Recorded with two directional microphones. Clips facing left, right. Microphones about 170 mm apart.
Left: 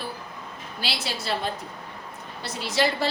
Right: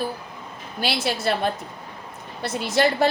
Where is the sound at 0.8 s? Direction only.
55° right (ahead or behind).